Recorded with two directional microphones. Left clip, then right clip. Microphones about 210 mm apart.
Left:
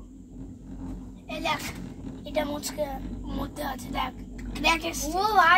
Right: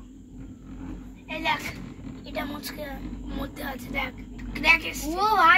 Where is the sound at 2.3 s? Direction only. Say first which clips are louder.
Left 4 dB; 15° left (ahead or behind).